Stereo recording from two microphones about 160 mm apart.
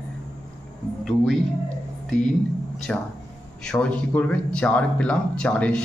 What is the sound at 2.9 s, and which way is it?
Speech, 5° left (ahead or behind).